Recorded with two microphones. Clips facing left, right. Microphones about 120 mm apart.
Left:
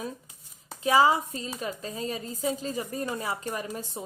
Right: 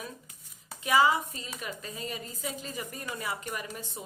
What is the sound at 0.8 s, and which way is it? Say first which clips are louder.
A woman's voice: left 3 dB; 30° left (ahead or behind).